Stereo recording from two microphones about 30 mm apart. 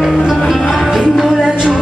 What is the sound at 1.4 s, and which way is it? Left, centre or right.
Music, right.